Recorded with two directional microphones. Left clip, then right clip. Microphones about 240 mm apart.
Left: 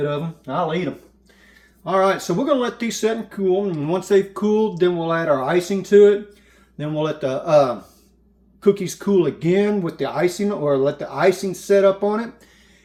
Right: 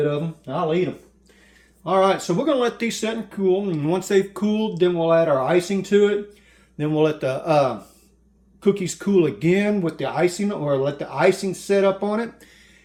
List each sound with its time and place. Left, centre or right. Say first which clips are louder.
1.8 s speech: even; right